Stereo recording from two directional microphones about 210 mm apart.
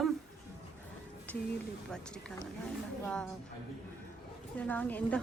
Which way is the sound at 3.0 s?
5° left (ahead or behind).